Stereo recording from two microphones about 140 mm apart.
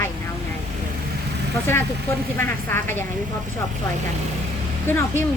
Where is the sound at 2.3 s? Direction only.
15° left (ahead or behind).